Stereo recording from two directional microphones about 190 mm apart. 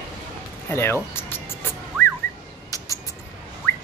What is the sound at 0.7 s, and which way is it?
Speech, 10° left (ahead or behind).